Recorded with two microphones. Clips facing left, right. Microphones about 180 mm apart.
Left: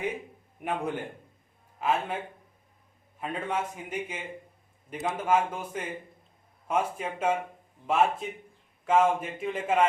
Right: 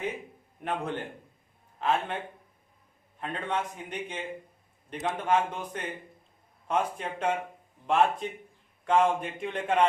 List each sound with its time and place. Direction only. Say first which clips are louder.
0.6 s a man's voice: left 1 dB; 10° left (ahead or behind)
3.2 s a man's voice: left 1 dB; 5° left (ahead or behind)